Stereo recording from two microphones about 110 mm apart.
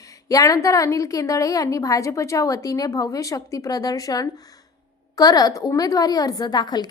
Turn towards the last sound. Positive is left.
turn(degrees=40)  # may be behind; listen again after turning